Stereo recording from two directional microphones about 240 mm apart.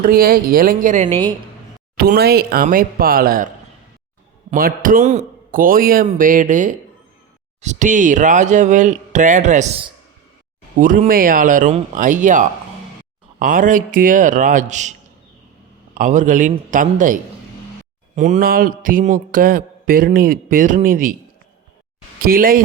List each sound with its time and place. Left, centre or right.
0.0 s mantra: right
4.5 s mantra: right
16.0 s mantra: right
22.2 s mantra: right